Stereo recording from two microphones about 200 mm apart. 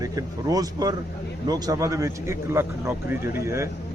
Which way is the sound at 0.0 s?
15° right (ahead or behind).